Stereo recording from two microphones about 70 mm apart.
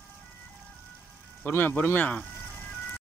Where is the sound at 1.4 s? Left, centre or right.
Left.